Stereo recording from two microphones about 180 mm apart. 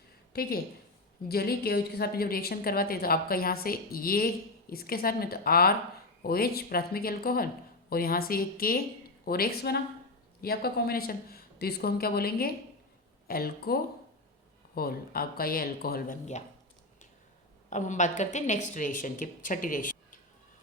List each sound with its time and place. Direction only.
0.3 s a woman's voice: 60° left (ahead or behind)
17.7 s a woman's voice: 40° left (ahead or behind)